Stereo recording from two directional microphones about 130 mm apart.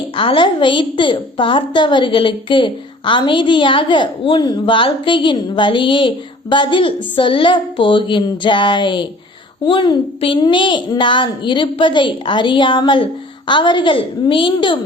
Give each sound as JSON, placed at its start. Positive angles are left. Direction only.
{"t": 0.2, "sound": "a woman's voice", "side_deg": 40}